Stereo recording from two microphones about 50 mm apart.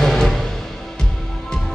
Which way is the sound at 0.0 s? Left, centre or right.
Centre.